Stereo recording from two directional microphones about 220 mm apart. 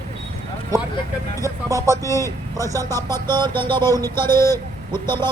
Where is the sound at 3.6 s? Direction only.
20° right (ahead or behind).